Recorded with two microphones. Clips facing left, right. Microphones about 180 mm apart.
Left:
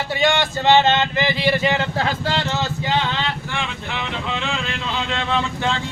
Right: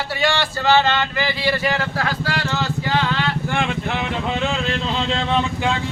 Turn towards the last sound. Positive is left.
turn(degrees=-50)  # may be behind; listen again after turning